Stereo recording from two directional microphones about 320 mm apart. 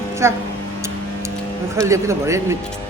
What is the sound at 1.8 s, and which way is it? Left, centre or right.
Speech, centre.